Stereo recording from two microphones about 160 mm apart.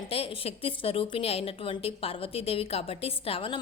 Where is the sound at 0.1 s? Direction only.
35° left (ahead or behind).